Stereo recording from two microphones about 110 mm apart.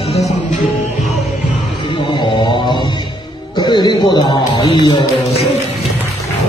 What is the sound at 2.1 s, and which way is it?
Music, 45° left (ahead or behind).